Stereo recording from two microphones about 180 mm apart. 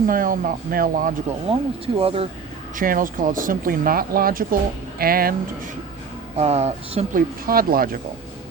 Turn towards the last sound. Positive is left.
turn(degrees=-55)  # may be behind; listen again after turning